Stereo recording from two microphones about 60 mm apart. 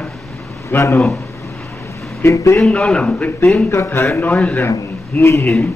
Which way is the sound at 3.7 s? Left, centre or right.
Left.